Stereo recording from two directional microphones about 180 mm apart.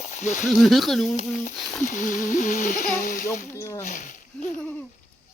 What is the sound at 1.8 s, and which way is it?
Speech, 45° left (ahead or behind).